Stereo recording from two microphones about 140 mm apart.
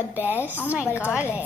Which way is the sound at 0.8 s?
15° left (ahead or behind).